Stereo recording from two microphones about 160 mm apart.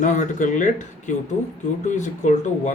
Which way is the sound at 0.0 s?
50° left (ahead or behind).